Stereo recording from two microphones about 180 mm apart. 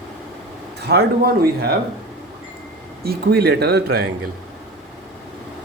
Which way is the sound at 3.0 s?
60° right (ahead or behind).